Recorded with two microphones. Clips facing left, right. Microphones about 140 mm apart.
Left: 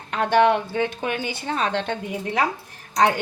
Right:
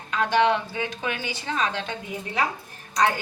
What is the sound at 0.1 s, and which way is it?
A woman's voice, 55° left (ahead or behind).